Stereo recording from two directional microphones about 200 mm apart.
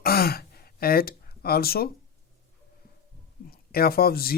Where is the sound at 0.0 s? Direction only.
50° left (ahead or behind).